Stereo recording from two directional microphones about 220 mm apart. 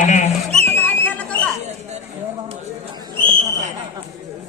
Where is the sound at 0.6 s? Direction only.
10° left (ahead or behind).